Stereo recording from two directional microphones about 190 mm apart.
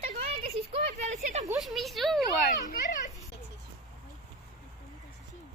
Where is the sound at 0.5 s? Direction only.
35° right (ahead or behind).